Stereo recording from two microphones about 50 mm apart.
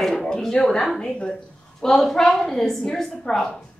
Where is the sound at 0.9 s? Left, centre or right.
Centre.